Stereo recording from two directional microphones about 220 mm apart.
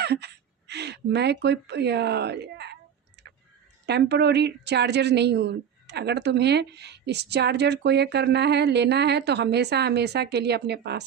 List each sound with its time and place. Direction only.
0.0 s gasp: 45° right (ahead or behind)
0.7 s a woman's voice: 50° right (ahead or behind)
3.8 s a woman's voice: 50° right (ahead or behind)